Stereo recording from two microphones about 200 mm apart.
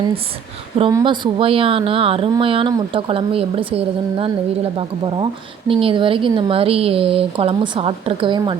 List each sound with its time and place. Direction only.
0.8 s speech: 20° right (ahead or behind)